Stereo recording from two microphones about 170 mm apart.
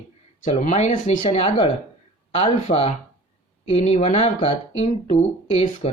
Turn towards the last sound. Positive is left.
turn(degrees=35)  # may be behind; listen again after turning